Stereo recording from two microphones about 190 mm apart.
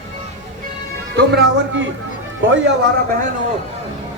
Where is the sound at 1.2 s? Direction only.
65° right (ahead or behind).